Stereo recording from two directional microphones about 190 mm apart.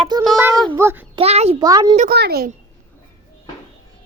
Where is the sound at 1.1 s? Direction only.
35° right (ahead or behind).